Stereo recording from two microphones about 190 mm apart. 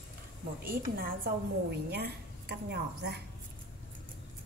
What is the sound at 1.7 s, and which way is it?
Speech, 55° right (ahead or behind).